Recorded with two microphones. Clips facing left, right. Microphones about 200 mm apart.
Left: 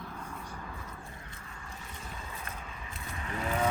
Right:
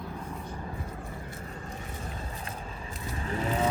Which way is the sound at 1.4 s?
35° right (ahead or behind).